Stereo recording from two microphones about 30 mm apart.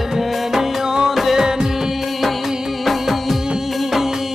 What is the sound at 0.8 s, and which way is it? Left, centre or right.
Music, right.